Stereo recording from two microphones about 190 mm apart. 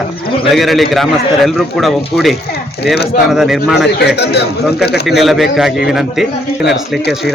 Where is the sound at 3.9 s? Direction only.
60° left (ahead or behind).